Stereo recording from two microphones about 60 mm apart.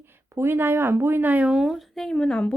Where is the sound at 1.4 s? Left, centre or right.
Centre.